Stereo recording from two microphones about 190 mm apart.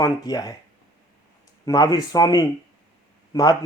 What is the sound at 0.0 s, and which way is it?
Speech, 20° left (ahead or behind).